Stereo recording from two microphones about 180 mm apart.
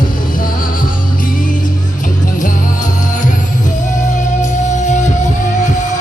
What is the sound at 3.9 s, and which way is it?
Music, 45° left (ahead or behind).